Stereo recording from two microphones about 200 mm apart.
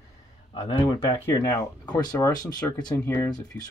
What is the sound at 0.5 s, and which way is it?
Speech, 25° left (ahead or behind).